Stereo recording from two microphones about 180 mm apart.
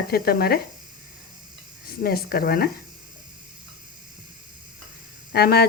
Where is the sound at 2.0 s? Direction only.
60° left (ahead or behind).